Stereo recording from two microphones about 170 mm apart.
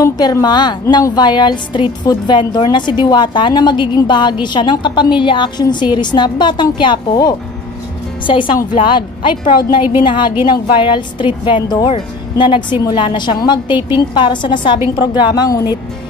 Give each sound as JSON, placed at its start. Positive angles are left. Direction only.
{"t": 0.0, "sound": "a woman's voice", "side_deg": 20}